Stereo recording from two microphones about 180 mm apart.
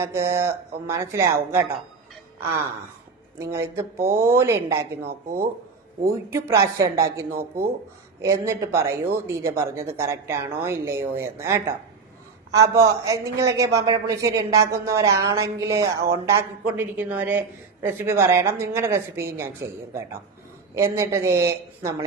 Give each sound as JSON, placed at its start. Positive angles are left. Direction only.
{"t": 0.0, "sound": "a man's voice", "side_deg": -15}
{"t": 3.3, "sound": "a man's voice", "side_deg": -15}
{"t": 6.1, "sound": "a man's voice", "side_deg": -15}